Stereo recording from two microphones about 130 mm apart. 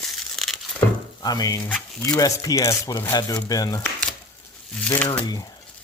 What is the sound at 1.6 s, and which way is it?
Speech, 10° left (ahead or behind).